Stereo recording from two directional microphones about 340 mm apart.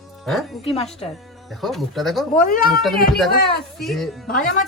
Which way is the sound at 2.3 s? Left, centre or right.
Left.